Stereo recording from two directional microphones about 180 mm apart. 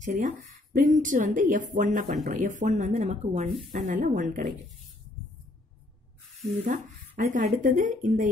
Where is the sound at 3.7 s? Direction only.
50° right (ahead or behind).